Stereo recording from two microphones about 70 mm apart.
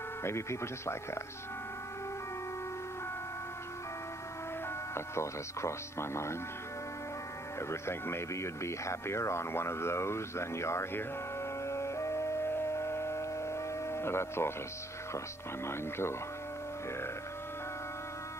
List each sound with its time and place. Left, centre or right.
0.2 s speech: left
4.9 s speech: left
7.5 s speech: left
11.6 s music: left
15.6 s speech: left